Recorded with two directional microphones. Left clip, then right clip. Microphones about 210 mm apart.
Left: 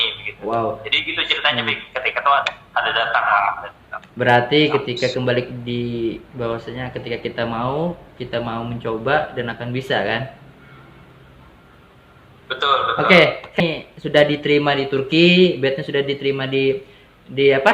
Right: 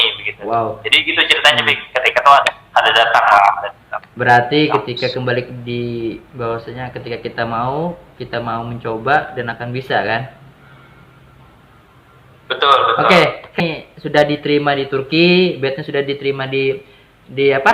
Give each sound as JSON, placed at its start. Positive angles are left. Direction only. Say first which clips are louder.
{"t": 0.0, "sound": "a sound", "louder": "right 6 dB", "side_deg": -25}
{"t": 0.8, "sound": "a man's voice", "louder": "right 7 dB", "side_deg": -20}
{"t": 4.3, "sound": "speech", "louder": "right 3 dB", "side_deg": -15}
{"t": 12.5, "sound": "speech", "louder": "right 6 dB", "side_deg": -25}